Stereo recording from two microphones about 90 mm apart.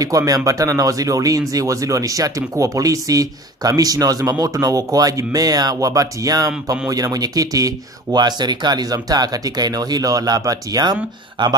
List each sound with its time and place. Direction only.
0.0 s speech: 40° right (ahead or behind)
11.4 s speech: 60° right (ahead or behind)